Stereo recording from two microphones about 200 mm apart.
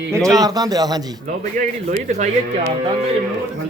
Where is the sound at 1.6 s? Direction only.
40° right (ahead or behind).